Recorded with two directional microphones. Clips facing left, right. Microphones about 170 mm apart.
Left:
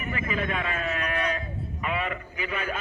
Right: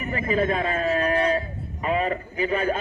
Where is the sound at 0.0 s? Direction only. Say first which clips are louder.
Right 6 dB; 30° right (ahead or behind).